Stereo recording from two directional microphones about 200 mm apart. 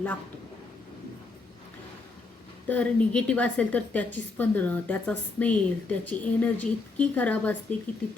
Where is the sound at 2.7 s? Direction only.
5° left (ahead or behind).